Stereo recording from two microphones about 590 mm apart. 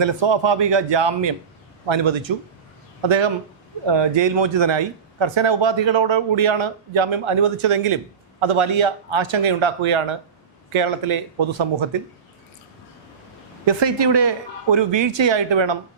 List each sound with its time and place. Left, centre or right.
0.0 s speech: right
13.7 s speech: right